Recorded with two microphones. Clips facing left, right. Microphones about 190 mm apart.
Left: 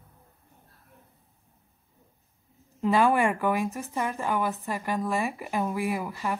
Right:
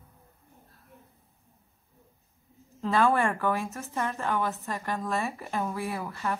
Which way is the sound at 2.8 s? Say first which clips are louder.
Left 2 dB; 15° left (ahead or behind).